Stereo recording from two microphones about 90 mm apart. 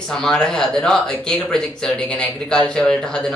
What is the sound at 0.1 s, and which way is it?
Speech, 10° left (ahead or behind).